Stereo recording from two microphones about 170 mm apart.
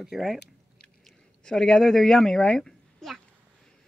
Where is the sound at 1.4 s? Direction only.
5° left (ahead or behind).